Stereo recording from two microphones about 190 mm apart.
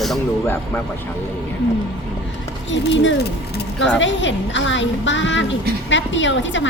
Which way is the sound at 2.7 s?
70° left (ahead or behind).